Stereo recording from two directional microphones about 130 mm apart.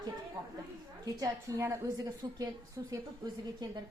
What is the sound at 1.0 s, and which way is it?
A woman's voice, 25° right (ahead or behind).